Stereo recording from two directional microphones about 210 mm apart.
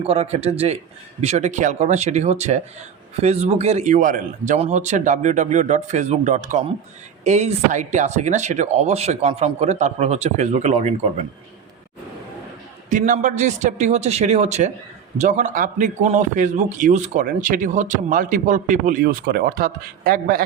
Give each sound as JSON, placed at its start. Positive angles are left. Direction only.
{"t": 0.0, "sound": "a man's voice", "side_deg": -30}
{"t": 12.9, "sound": "a man's voice", "side_deg": -35}